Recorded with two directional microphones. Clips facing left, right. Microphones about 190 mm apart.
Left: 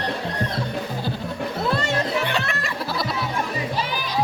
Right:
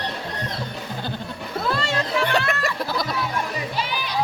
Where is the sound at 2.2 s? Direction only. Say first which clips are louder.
Right 3 dB; 45° right (ahead or behind).